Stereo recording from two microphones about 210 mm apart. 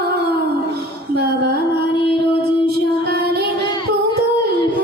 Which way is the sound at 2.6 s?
50° right (ahead or behind).